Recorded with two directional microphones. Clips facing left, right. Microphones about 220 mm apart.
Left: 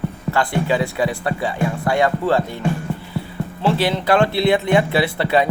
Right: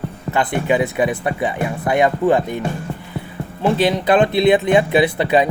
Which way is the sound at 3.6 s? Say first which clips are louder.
Right 2 dB; 20° right (ahead or behind).